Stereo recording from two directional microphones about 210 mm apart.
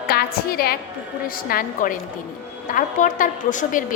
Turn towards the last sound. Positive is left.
turn(degrees=40)  # may be behind; listen again after turning